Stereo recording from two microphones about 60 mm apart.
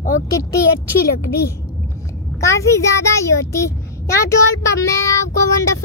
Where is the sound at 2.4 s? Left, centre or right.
Left.